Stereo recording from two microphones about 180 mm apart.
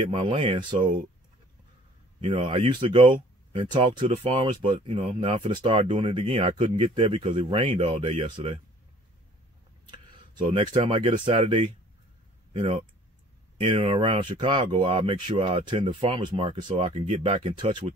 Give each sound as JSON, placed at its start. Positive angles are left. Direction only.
{"t": 0.0, "sound": "speech", "side_deg": -30}
{"t": 2.1, "sound": "speech", "side_deg": -35}
{"t": 9.8, "sound": "speech", "side_deg": -25}